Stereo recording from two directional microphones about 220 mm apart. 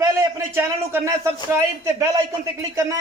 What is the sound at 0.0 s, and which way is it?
A man's voice, 15° right (ahead or behind).